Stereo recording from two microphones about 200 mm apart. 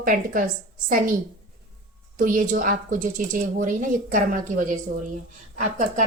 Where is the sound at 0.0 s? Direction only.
45° right (ahead or behind).